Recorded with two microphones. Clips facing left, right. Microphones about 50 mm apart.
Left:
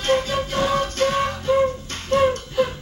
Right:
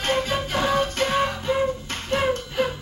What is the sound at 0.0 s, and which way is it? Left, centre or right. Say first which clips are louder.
Music: left 3 dB; right.